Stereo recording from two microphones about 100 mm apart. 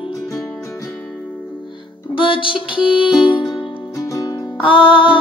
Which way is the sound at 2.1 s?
60° left (ahead or behind).